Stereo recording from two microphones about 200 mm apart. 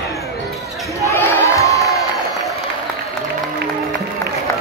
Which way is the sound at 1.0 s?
15° left (ahead or behind).